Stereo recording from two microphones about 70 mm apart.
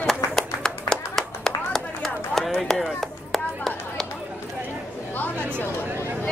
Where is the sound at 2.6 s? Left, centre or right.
Centre.